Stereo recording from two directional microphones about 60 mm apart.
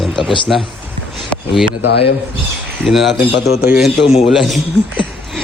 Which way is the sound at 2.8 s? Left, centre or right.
Centre.